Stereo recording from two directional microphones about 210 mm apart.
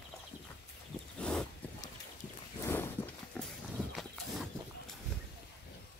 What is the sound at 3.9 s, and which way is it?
Horse, centre (ahead or behind).